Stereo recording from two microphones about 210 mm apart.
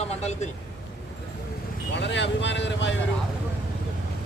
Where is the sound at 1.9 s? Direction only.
55° left (ahead or behind).